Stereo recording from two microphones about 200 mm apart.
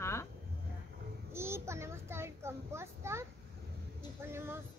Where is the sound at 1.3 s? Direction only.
10° right (ahead or behind).